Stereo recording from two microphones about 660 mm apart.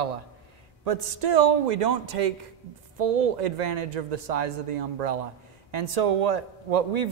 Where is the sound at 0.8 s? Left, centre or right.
Right.